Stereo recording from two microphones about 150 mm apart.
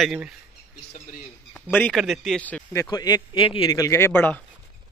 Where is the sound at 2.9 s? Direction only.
30° left (ahead or behind).